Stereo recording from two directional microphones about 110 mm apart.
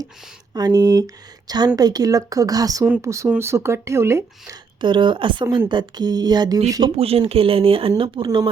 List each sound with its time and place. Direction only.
0.5 s speech: 35° right (ahead or behind)
4.8 s a woman's voice: 45° right (ahead or behind)
6.9 s speech: 65° right (ahead or behind); by 8.4 s 45° right (ahead or behind)